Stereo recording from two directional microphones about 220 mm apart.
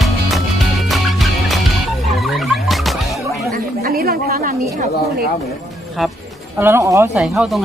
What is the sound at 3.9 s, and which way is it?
Speech, 40° right (ahead or behind).